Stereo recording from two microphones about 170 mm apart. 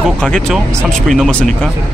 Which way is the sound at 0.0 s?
Centre (ahead or behind).